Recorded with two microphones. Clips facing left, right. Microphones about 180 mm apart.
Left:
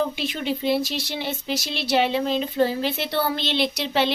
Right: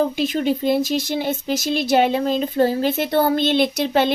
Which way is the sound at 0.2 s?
45° right (ahead or behind).